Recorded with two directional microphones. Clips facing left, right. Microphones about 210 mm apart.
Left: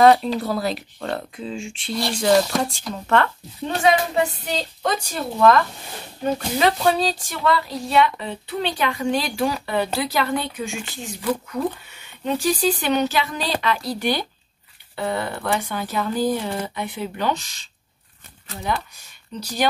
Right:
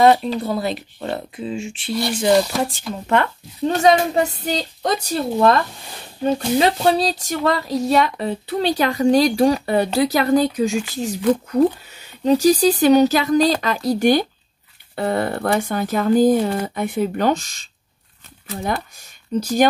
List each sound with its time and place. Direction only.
0.0 s speech: centre (ahead or behind)
3.6 s speech: 40° right (ahead or behind)
19.3 s speech: 45° right (ahead or behind)